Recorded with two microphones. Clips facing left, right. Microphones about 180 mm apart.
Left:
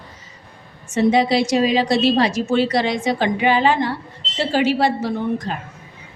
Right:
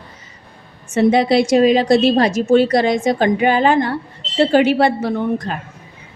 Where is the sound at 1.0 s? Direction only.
55° right (ahead or behind).